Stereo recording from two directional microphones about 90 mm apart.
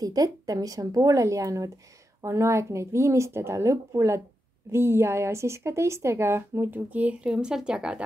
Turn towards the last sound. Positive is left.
turn(degrees=-10)  # may be behind; listen again after turning